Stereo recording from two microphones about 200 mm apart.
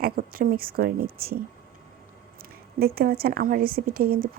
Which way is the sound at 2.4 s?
50° right (ahead or behind).